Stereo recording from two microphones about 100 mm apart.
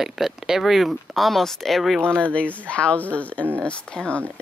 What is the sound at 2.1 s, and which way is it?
Speech, 10° left (ahead or behind).